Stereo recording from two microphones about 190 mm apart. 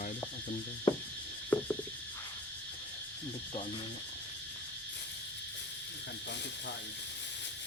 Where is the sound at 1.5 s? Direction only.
10° left (ahead or behind).